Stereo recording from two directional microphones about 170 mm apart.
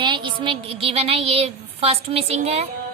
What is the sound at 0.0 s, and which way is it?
A woman's voice, 30° right (ahead or behind).